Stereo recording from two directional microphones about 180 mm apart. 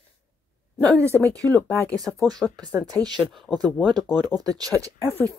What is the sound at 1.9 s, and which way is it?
Speech, 5° left (ahead or behind).